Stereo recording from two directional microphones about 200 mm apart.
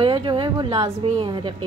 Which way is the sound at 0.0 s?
25° right (ahead or behind).